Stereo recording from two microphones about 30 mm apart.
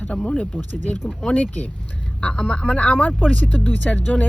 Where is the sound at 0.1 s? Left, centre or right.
Left.